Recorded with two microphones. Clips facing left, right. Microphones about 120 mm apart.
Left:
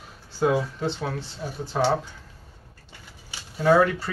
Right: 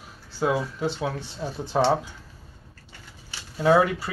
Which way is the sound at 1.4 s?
25° right (ahead or behind).